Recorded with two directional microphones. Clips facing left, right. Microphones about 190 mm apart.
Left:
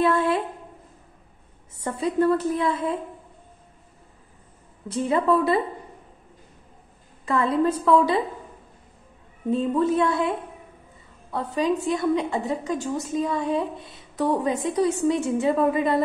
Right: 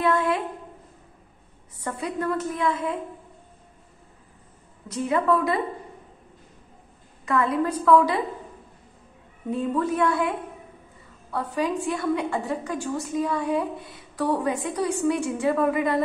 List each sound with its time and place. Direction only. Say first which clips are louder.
0.1 s a sound: left 1 dB; 30° left (ahead or behind)
1.8 s a woman's voice: left 6 dB; 25° left (ahead or behind)
4.8 s a woman's voice: left 1 dB; 30° left (ahead or behind)
7.2 s a woman's voice: left 2 dB; 30° left (ahead or behind)
9.5 s a woman's voice: left 3 dB; 25° left (ahead or behind)
11.3 s a woman's voice: left 2 dB; 20° left (ahead or behind)